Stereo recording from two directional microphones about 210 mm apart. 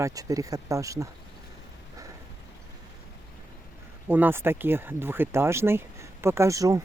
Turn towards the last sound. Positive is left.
turn(degrees=-15)  # may be behind; listen again after turning